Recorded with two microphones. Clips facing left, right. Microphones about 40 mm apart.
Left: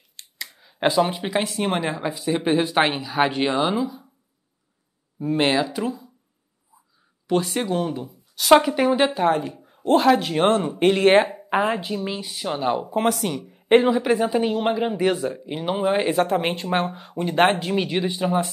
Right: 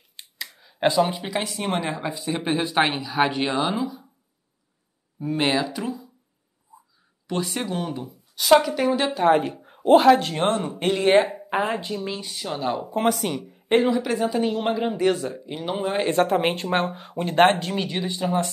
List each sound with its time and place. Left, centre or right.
0.2 s a sound: centre
0.7 s a woman's voice: centre
1.5 s speech: centre
5.3 s speech: centre
7.2 s speech: centre
8.6 s a woman's voice: left
9.3 s speech: right
9.8 s speech: centre
10.8 s speech: left
11.4 s speech: centre
12.8 s speech: centre
13.7 s speech: left; by 17.6 s centre
17.6 s speech: centre